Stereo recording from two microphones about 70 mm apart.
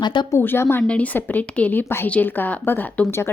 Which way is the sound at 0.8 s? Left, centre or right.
Centre.